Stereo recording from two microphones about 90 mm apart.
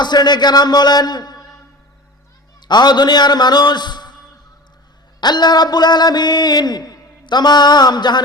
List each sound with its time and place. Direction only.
0.0 s speech: 55° left (ahead or behind)
2.6 s speech: 55° left (ahead or behind)
5.2 s speech: 50° left (ahead or behind)